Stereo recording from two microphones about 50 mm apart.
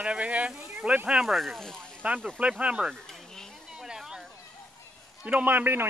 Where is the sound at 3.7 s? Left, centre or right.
Centre.